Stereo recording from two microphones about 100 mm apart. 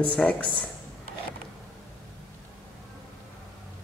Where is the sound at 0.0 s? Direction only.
10° left (ahead or behind).